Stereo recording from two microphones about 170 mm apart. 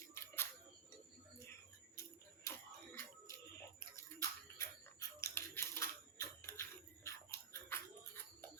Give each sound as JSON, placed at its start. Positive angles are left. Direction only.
{"t": 0.1, "sound": "a sound", "side_deg": 15}
{"t": 2.0, "sound": "music", "side_deg": 15}
{"t": 4.5, "sound": "typewriter", "side_deg": 15}